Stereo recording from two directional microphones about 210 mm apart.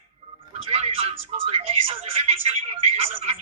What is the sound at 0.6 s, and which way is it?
Speech, 25° right (ahead or behind).